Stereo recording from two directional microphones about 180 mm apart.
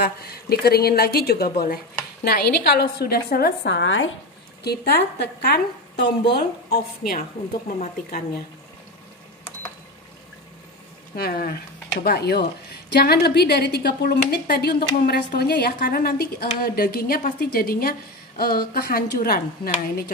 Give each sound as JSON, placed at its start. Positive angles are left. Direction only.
{"t": 0.0, "sound": "a woman's voice", "side_deg": 60}
{"t": 4.6, "sound": "a woman's voice", "side_deg": 60}
{"t": 7.2, "sound": "speech", "side_deg": 45}
{"t": 11.1, "sound": "a woman's voice", "side_deg": 55}